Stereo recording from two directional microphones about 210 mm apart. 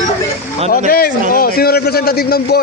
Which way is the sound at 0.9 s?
45° left (ahead or behind).